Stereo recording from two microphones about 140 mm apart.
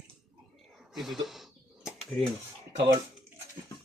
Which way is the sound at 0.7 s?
Centre (ahead or behind).